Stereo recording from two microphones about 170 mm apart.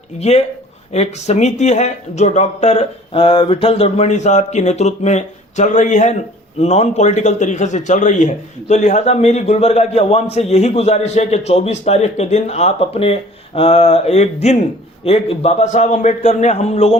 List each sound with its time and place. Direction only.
0.2 s a man's voice: 40° left (ahead or behind)